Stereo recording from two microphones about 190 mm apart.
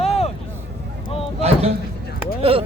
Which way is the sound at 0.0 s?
35° left (ahead or behind).